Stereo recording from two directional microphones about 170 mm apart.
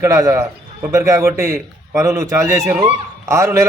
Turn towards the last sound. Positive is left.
turn(degrees=-15)  # may be behind; listen again after turning